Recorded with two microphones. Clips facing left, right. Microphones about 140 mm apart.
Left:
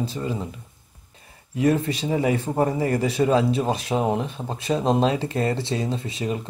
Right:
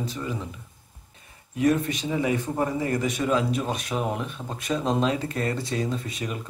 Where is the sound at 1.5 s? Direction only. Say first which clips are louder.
Left 2 dB; 30° left (ahead or behind).